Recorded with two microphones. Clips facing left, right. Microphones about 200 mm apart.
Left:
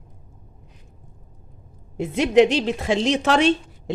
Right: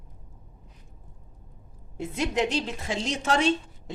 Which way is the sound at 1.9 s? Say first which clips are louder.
Left 11 dB; 75° left (ahead or behind).